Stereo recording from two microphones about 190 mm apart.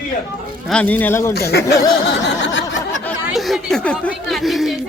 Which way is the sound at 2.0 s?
65° left (ahead or behind).